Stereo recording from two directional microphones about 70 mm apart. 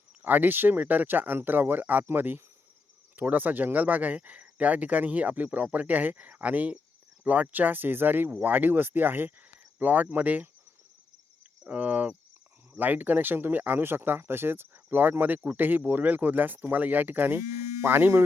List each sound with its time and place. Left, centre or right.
0.2 s speech: right
11.6 s speech: centre